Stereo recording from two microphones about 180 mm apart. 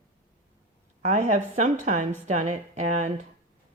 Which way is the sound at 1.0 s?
40° right (ahead or behind).